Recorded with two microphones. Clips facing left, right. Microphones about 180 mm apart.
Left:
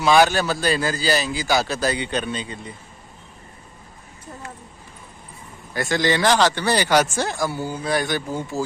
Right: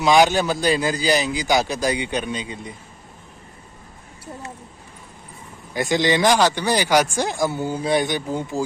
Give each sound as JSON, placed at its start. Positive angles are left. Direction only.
{"t": 0.0, "sound": "speech", "side_deg": -15}
{"t": 5.7, "sound": "speech", "side_deg": -15}